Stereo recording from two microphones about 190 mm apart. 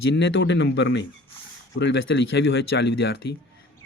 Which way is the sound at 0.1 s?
75° left (ahead or behind).